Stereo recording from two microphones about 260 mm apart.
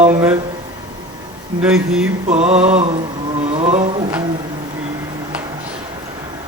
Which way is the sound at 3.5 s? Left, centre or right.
Right.